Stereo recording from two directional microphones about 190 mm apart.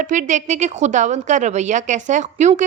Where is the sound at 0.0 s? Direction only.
40° right (ahead or behind).